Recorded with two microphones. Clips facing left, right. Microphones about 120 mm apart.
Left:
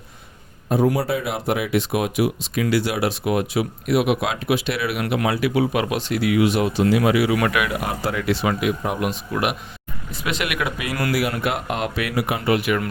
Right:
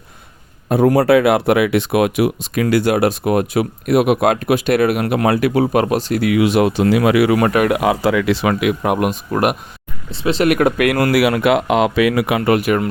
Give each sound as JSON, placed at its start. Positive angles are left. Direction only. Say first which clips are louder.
{"t": 0.7, "sound": "speech", "louder": "right 8 dB", "side_deg": -65}
{"t": 6.2, "sound": "speech", "louder": "right 4 dB", "side_deg": -85}
{"t": 7.3, "sound": "speech", "louder": "right 6 dB", "side_deg": -40}
{"t": 7.7, "sound": "speech", "louder": "right 9 dB", "side_deg": -90}
{"t": 10.1, "sound": "speech", "louder": "right 11 dB", "side_deg": -30}
{"t": 11.1, "sound": "speech", "louder": "right 9 dB", "side_deg": -85}
{"t": 12.5, "sound": "speech", "louder": "right 4 dB", "side_deg": -45}